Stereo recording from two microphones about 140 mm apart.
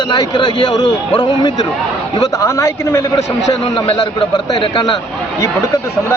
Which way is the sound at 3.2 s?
55° left (ahead or behind).